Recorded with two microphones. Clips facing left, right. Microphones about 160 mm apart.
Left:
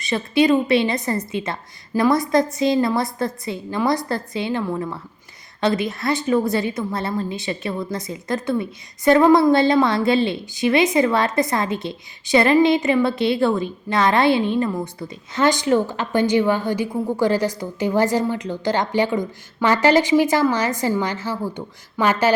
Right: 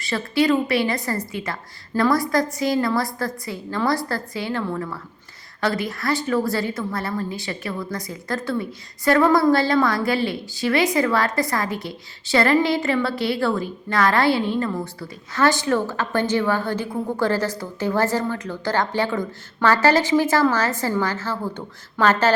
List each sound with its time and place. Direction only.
0.0 s a woman's voice: 20° left (ahead or behind)